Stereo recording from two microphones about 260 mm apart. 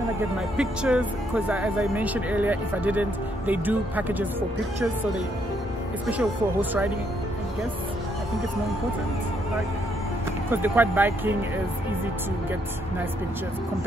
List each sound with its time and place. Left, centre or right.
0.6 s speech: centre
6.0 s speech: centre
10.5 s speech: centre